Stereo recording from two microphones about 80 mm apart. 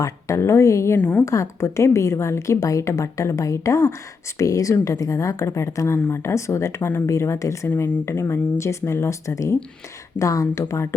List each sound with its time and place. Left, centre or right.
0.0 s a woman's voice: left
0.9 s a woman's voice: centre
1.2 s a woman's voice: left